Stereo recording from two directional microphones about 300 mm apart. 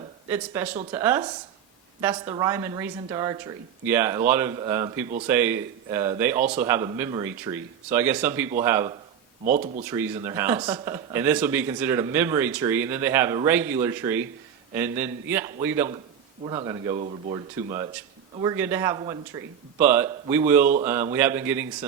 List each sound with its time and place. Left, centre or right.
0.3 s speech: centre
9.4 s speech: right
9.8 s speech: centre